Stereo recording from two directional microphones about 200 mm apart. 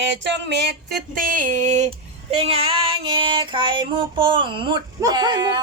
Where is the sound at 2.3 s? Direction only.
30° right (ahead or behind).